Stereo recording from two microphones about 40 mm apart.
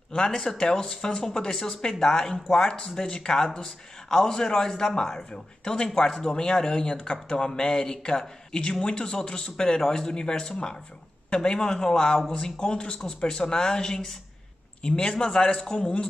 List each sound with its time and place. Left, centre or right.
0.1 s speech: centre